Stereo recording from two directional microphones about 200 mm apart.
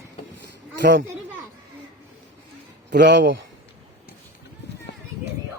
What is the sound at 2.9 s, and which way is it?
Speech, 60° right (ahead or behind).